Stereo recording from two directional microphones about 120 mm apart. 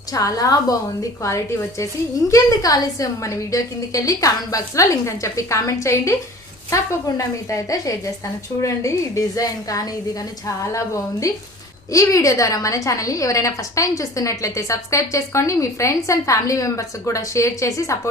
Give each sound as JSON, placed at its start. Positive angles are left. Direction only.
{"t": 0.1, "sound": "a woman's voice", "side_deg": 30}
{"t": 2.3, "sound": "a woman's voice", "side_deg": 30}